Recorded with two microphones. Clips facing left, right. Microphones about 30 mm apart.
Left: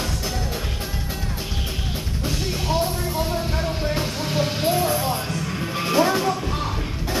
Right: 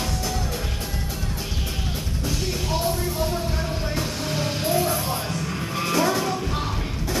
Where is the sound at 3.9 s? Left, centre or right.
Left.